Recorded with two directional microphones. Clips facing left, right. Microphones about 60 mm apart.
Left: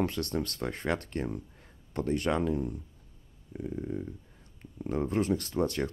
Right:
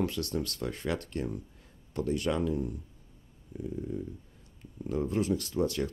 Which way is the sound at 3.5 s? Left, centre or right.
Left.